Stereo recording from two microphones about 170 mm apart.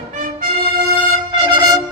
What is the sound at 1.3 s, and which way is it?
Brass instrument, 30° right (ahead or behind).